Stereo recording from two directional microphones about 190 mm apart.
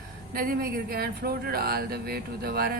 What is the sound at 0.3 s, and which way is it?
Speech, 50° right (ahead or behind).